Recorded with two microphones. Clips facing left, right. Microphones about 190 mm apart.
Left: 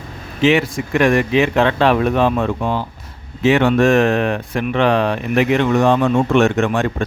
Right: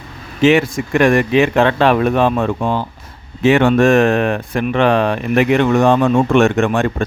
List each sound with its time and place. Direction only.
0.4 s speech: 50° right (ahead or behind)